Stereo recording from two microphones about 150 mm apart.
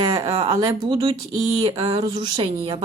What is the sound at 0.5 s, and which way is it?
Speech, 20° right (ahead or behind).